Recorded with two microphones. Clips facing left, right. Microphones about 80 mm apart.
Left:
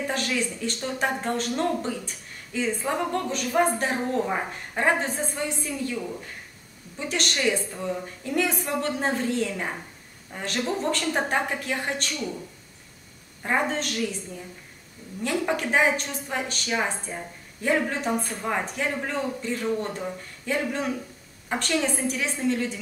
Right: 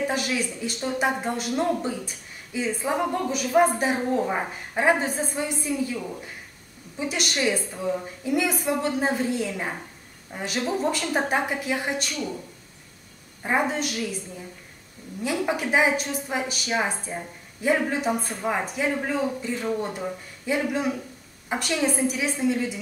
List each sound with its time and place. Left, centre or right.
0.0 s speech: centre
7.0 s speech: centre
13.4 s speech: centre
15.2 s speech: centre